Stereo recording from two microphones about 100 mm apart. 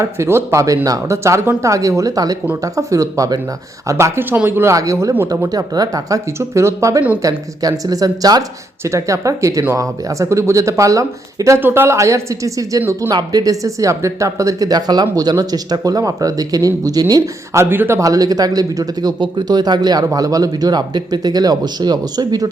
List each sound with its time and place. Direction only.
0.0 s a woman's voice: 25° right (ahead or behind)
3.8 s a woman's voice: 30° right (ahead or behind)
13.1 s a woman's voice: 45° right (ahead or behind)
17.6 s a woman's voice: 20° right (ahead or behind); by 22.4 s 40° right (ahead or behind)